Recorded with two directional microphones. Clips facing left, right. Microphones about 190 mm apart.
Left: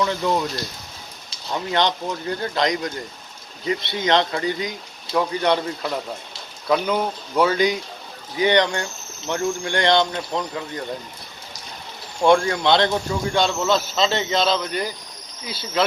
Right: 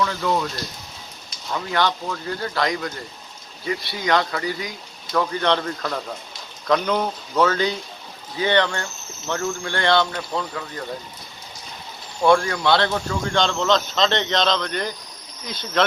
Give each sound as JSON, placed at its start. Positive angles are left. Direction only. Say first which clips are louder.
{"t": 0.0, "sound": "speech", "louder": "left 1 dB", "side_deg": 20}
{"t": 1.5, "sound": "speech", "louder": "left 1 dB", "side_deg": 20}
{"t": 12.2, "sound": "speech", "louder": "left 1 dB", "side_deg": 25}